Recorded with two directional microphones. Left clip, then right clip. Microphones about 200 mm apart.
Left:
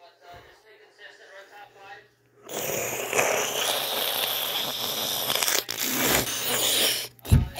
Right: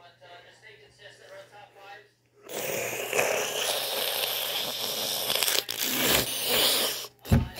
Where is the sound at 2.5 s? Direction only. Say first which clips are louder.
Left 2 dB; 5° left (ahead or behind).